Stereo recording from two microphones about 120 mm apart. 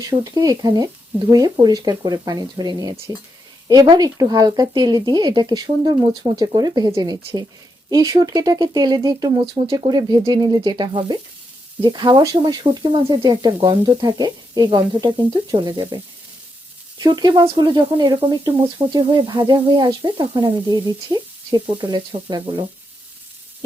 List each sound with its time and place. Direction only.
0.1 s speech: 35° right (ahead or behind)
17.0 s speech: 35° right (ahead or behind)